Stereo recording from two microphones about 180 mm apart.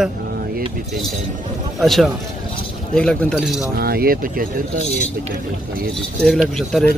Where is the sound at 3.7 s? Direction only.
60° right (ahead or behind).